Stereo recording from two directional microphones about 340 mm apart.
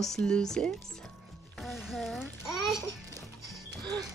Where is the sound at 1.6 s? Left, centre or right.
Centre.